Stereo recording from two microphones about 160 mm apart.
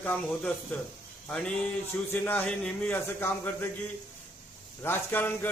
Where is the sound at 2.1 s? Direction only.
10° left (ahead or behind).